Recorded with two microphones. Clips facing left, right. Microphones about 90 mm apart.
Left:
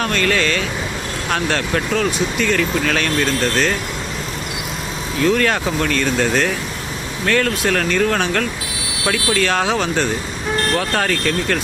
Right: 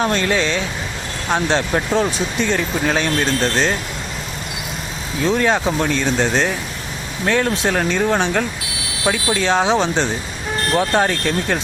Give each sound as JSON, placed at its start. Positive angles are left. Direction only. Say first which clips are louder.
{"t": 0.0, "sound": "speech", "louder": "even", "side_deg": -20}
{"t": 5.2, "sound": "speech", "louder": "even", "side_deg": -20}